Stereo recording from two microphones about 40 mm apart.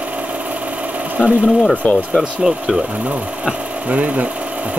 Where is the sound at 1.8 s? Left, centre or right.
Left.